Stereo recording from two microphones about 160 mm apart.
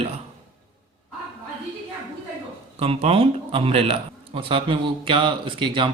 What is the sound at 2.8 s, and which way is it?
A man's voice, 35° right (ahead or behind).